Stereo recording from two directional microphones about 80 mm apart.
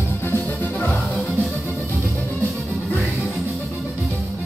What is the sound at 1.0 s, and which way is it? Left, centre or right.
Music, centre.